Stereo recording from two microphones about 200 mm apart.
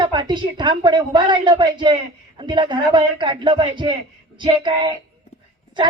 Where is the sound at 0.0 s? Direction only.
20° right (ahead or behind).